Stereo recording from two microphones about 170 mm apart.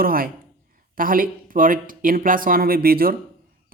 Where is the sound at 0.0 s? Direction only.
60° right (ahead or behind).